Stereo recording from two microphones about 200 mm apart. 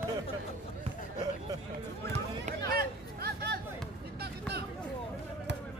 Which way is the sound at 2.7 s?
50° right (ahead or behind).